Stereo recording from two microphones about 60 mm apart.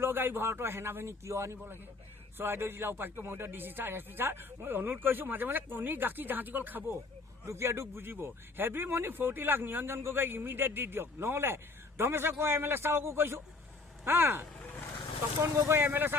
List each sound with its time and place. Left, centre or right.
0.0 s speech: right
1.2 s speech: right
2.4 s speech: right
7.4 s speech: right